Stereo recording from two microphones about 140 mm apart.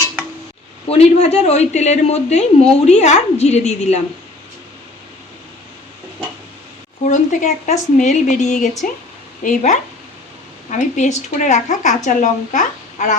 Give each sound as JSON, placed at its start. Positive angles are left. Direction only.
{"t": 0.9, "sound": "speech", "side_deg": 50}
{"t": 7.0, "sound": "a woman's voice", "side_deg": 55}
{"t": 8.8, "sound": "speech", "side_deg": 75}
{"t": 9.4, "sound": "a woman's voice", "side_deg": 60}